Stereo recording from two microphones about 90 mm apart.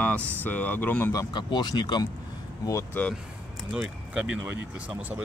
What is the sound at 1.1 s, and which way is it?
Speech, 55° left (ahead or behind).